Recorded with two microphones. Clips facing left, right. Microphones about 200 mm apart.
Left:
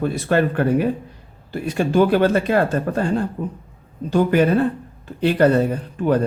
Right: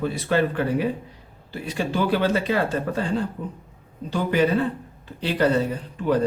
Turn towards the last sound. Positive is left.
turn(degrees=50)  # may be behind; listen again after turning